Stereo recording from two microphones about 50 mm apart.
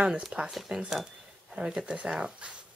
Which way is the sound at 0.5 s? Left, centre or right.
Centre.